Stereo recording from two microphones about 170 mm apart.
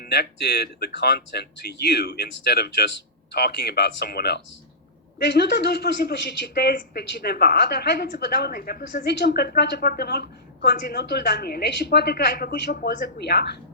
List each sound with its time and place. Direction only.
0.0 s speech: 75° left (ahead or behind)